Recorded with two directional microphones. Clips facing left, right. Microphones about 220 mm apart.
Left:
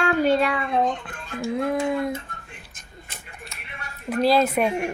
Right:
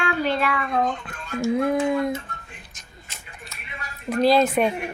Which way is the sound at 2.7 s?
55° left (ahead or behind).